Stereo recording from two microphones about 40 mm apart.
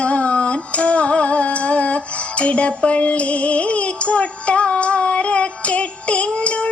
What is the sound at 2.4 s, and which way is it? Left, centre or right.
Music, left.